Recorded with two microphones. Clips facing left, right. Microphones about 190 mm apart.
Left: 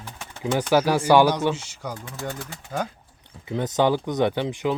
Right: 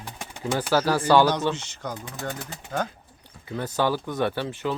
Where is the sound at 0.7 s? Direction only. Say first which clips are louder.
Left 2 dB; 15° left (ahead or behind).